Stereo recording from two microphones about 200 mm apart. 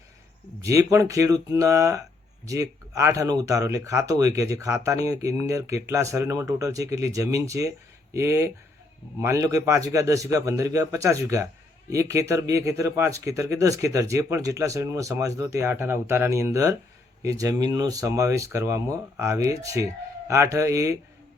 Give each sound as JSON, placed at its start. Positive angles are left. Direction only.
{"t": 0.6, "sound": "speech", "side_deg": -15}